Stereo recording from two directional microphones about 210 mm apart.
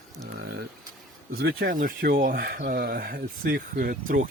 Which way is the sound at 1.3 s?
50° right (ahead or behind).